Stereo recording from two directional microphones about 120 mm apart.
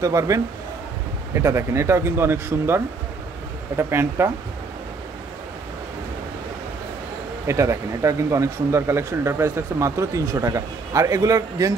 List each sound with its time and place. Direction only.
0.0 s speech: 25° right (ahead or behind)
7.4 s speech: 25° right (ahead or behind)